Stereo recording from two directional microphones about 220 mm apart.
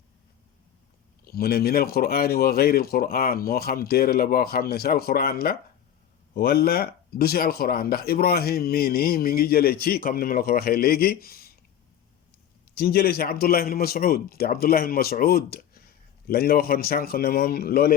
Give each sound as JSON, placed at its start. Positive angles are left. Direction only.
{"t": 1.2, "sound": "speech", "side_deg": 45}
{"t": 12.7, "sound": "speech", "side_deg": 45}